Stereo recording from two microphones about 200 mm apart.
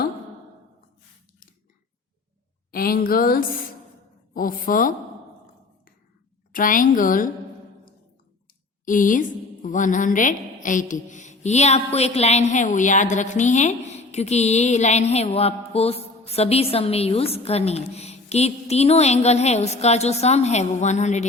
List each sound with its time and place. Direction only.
2.7 s a woman's voice: 45° left (ahead or behind)
6.5 s a woman's voice: 40° left (ahead or behind)
8.8 s a woman's voice: 40° left (ahead or behind)